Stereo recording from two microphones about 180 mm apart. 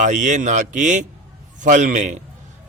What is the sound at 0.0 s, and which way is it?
A man's voice, 45° right (ahead or behind).